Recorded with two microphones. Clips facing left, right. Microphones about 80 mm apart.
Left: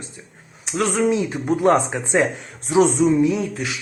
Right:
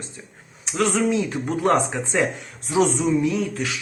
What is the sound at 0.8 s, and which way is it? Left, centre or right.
Speech, left.